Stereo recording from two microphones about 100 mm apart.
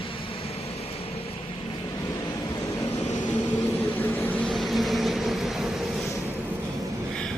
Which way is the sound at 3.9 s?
20° left (ahead or behind).